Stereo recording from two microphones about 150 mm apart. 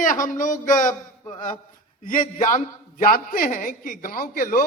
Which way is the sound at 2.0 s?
65° left (ahead or behind).